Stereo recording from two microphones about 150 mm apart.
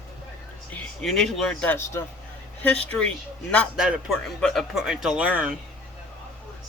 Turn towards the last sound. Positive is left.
turn(degrees=-10)  # may be behind; listen again after turning